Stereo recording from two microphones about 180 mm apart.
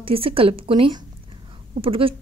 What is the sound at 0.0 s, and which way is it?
A woman's voice, 30° right (ahead or behind).